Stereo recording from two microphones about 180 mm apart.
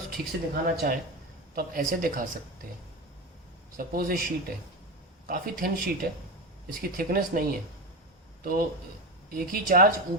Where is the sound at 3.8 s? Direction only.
55° right (ahead or behind).